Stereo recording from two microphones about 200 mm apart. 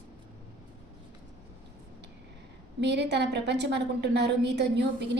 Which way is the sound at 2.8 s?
60° right (ahead or behind).